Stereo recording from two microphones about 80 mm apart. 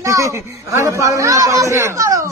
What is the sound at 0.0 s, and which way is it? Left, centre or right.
A man's voice, right.